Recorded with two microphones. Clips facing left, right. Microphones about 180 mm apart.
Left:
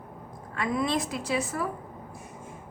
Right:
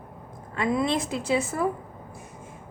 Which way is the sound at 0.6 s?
25° right (ahead or behind).